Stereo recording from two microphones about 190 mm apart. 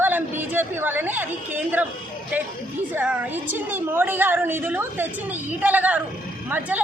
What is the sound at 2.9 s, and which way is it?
Speech, 10° right (ahead or behind).